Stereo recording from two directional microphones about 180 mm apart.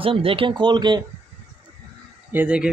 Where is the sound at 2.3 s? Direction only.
10° right (ahead or behind).